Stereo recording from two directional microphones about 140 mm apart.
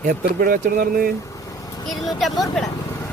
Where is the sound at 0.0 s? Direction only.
85° right.